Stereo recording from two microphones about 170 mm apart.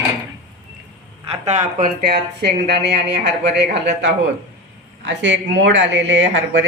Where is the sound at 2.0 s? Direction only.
70° right (ahead or behind).